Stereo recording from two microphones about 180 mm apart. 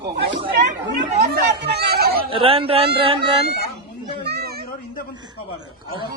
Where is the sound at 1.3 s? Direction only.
65° right (ahead or behind).